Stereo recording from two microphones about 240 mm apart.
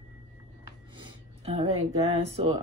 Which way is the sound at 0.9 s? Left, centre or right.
Right.